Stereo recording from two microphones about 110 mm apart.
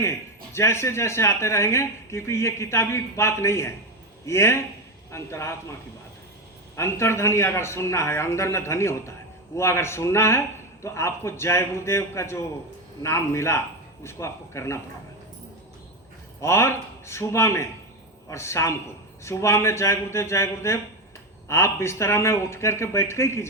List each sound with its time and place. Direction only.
0.0 s speech: 25° left (ahead or behind)
6.7 s speech: 25° left (ahead or behind)
16.4 s speech: 25° left (ahead or behind)